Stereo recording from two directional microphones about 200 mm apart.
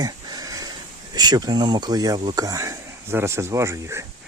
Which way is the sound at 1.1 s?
20° right (ahead or behind).